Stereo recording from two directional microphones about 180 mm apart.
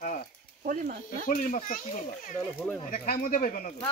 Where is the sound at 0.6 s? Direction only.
45° right (ahead or behind).